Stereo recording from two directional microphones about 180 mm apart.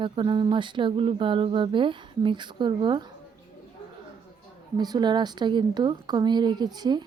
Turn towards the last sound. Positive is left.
turn(degrees=-25)  # may be behind; listen again after turning